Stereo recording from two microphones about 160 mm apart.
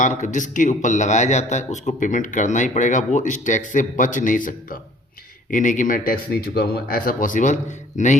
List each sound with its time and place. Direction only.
0.0 s a man's voice: 50° left (ahead or behind)